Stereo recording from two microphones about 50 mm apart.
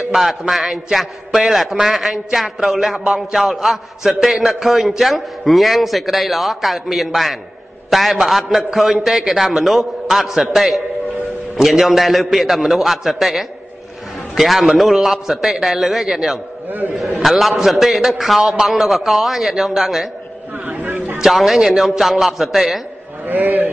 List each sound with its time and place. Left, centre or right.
0.1 s a man's voice: centre
20.6 s speech: right
21.2 s a man's voice: centre
23.2 s a man's voice: right